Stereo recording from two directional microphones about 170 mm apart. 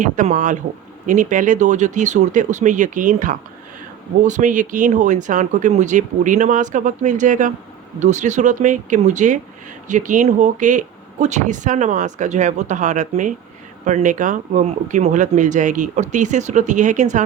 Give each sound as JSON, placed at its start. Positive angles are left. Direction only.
{"t": 0.0, "sound": "speech", "side_deg": -50}